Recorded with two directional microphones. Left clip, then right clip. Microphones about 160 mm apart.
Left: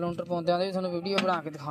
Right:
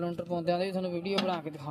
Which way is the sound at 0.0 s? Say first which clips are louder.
Left 3 dB; 10° right (ahead or behind).